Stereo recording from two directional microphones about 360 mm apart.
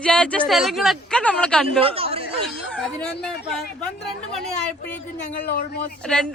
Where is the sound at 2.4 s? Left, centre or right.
Centre.